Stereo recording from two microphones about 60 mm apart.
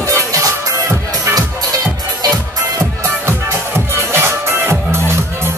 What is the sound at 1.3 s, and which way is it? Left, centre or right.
Music, right.